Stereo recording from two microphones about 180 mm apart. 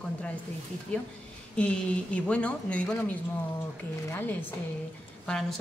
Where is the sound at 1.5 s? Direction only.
5° left (ahead or behind).